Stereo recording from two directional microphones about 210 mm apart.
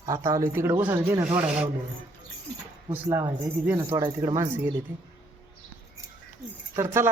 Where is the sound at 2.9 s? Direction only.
10° right (ahead or behind).